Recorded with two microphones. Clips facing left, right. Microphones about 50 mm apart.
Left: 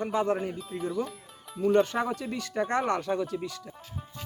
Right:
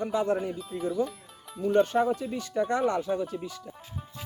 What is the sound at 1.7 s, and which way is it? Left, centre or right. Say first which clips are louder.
Speech: right 3 dB; left.